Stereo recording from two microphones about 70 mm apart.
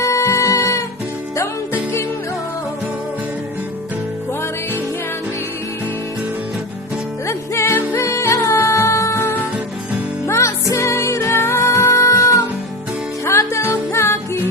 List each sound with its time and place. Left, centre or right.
0.0 s music: left
1.7 s music: left
7.3 s music: left